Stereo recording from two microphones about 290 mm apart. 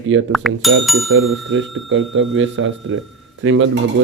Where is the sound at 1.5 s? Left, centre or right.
Right.